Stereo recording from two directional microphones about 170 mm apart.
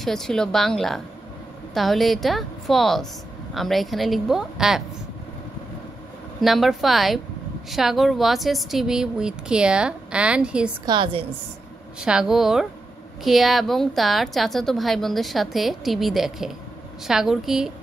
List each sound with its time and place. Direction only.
0.0 s a woman's voice: centre (ahead or behind)
6.4 s a woman's voice: centre (ahead or behind)
10.9 s a woman's voice: 30° right (ahead or behind)
12.0 s a woman's voice: 5° right (ahead or behind)